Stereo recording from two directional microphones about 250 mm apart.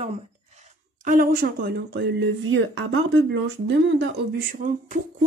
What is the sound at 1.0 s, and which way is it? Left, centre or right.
Speech, right.